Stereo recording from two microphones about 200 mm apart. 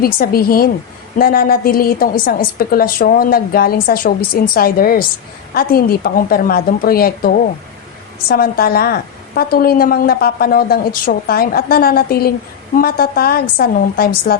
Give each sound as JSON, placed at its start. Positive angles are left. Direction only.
{"t": 0.0, "sound": "a woman's voice", "side_deg": 50}